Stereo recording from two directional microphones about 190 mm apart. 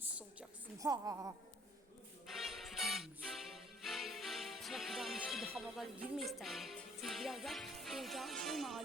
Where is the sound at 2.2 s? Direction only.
Centre (ahead or behind).